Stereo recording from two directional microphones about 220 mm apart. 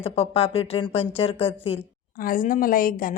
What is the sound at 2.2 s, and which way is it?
Speech, 40° left (ahead or behind).